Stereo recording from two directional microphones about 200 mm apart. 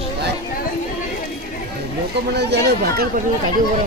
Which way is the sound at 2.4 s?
55° right (ahead or behind).